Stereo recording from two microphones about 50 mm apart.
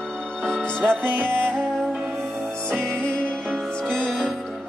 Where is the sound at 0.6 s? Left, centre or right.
Centre.